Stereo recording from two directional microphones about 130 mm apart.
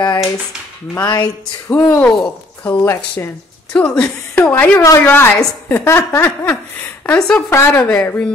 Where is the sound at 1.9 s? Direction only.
10° left (ahead or behind).